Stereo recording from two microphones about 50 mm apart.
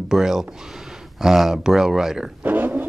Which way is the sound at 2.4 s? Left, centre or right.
Right.